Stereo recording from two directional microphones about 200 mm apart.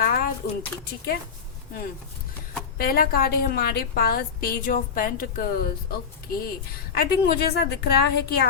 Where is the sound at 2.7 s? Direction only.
45° left (ahead or behind).